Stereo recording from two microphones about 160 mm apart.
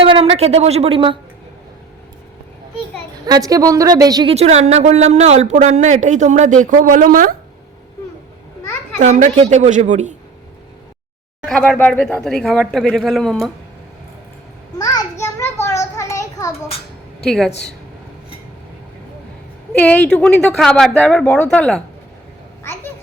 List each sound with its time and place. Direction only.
0.0 s a woman's voice: 35° right (ahead or behind)
3.2 s a woman's voice: 20° right (ahead or behind)
4.3 s speech: 40° right (ahead or behind); by 7.3 s 60° right (ahead or behind)
9.0 s speech: 50° right (ahead or behind)
11.4 s speech: 5° left (ahead or behind)
15.2 s a sound: 15° left (ahead or behind)
16.6 s a sound: 40° left (ahead or behind)
17.2 s speech: 5° left (ahead or behind)
19.7 s speech: 10° left (ahead or behind)
22.6 s a sound: 15° left (ahead or behind)